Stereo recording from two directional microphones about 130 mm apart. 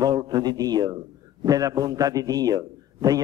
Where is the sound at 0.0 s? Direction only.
30° right (ahead or behind).